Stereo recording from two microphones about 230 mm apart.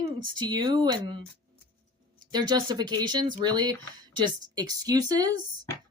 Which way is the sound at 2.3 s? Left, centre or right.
Centre.